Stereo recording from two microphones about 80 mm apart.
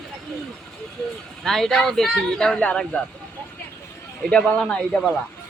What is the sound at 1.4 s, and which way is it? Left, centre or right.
Speech, centre.